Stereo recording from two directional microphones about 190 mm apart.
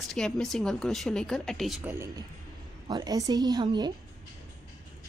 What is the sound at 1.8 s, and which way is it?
A man's voice, 15° right (ahead or behind).